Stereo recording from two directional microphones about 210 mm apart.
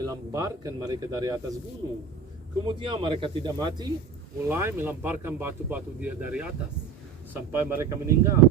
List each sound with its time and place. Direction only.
0.0 s speech: 15° right (ahead or behind)
2.6 s speech: 25° right (ahead or behind)
4.4 s speech: 10° right (ahead or behind)
7.5 s speech: 10° right (ahead or behind)